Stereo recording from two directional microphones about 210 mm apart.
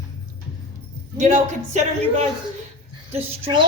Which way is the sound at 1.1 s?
35° right (ahead or behind).